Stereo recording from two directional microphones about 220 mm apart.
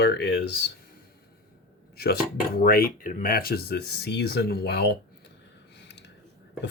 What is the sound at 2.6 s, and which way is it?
Speech, 40° left (ahead or behind).